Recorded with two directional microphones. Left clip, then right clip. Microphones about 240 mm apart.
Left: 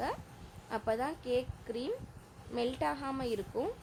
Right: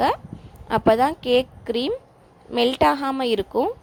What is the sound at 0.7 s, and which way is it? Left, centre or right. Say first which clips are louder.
A woman's voice: right 17 dB; right.